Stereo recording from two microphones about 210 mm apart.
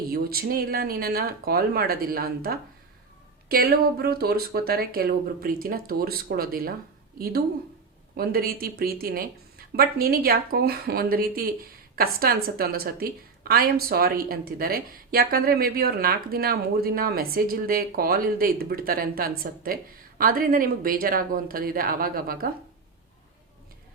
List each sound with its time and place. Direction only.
0.1 s speech: 45° right (ahead or behind)